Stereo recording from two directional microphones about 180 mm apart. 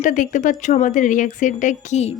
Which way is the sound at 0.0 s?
45° left (ahead or behind).